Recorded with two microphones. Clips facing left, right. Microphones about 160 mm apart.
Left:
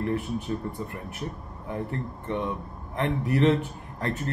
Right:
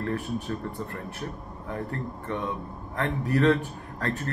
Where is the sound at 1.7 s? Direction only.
20° left (ahead or behind).